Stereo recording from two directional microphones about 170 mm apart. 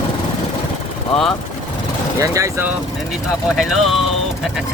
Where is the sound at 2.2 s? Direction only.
20° right (ahead or behind).